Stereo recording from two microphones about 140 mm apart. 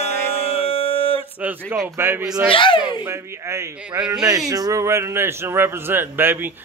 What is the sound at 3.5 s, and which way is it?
Speech, 10° right (ahead or behind).